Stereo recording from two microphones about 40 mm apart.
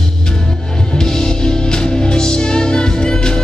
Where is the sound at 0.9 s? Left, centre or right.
Centre.